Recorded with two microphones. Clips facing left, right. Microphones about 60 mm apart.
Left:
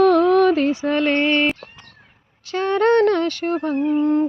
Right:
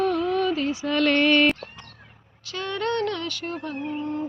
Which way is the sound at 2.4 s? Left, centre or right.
Left.